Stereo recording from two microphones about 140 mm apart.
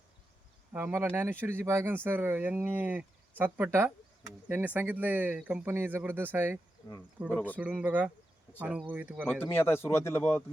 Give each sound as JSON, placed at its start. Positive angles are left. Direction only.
{"t": 0.7, "sound": "speech", "side_deg": -10}
{"t": 7.3, "sound": "speech", "side_deg": 10}
{"t": 7.5, "sound": "speech", "side_deg": -10}
{"t": 9.2, "sound": "speech", "side_deg": 15}